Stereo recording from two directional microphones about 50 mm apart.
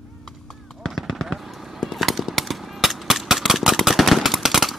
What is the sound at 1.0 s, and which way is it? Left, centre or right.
Machine gun, centre.